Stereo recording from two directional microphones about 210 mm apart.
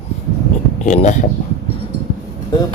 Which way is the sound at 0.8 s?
35° left (ahead or behind).